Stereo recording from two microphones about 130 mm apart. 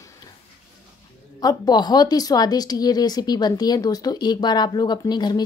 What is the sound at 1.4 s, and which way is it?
Speech, 30° left (ahead or behind).